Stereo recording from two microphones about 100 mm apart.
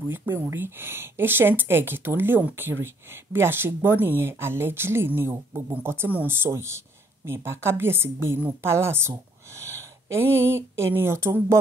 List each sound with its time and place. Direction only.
0.1 s speech: 25° right (ahead or behind)